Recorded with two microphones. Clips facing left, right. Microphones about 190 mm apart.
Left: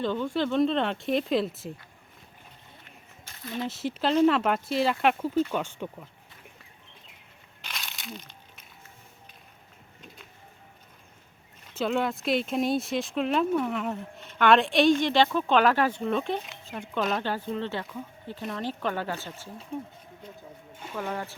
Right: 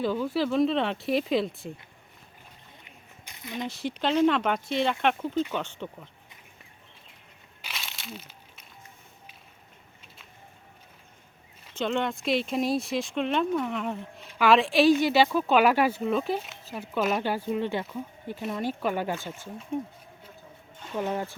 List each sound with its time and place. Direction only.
0.0 s speech: 5° right (ahead or behind)
2.8 s a sound: 15° right (ahead or behind)
3.6 s speech: centre (ahead or behind)
7.6 s crumpling: centre (ahead or behind)
11.7 s speech: 5° left (ahead or behind); by 19.3 s 15° right (ahead or behind)
20.9 s speech: 15° right (ahead or behind)